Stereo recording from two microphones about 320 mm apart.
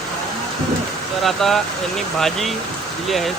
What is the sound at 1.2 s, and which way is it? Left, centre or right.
Speech, centre.